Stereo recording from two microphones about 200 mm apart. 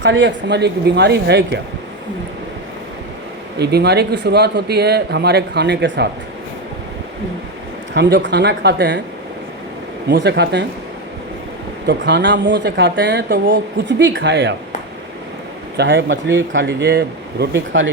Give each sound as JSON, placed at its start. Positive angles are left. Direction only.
{"t": 0.0, "sound": "speech", "side_deg": -65}
{"t": 3.6, "sound": "speech", "side_deg": -55}
{"t": 7.9, "sound": "speech", "side_deg": -60}
{"t": 10.1, "sound": "speech", "side_deg": -60}
{"t": 11.9, "sound": "speech", "side_deg": -60}
{"t": 15.8, "sound": "speech", "side_deg": -65}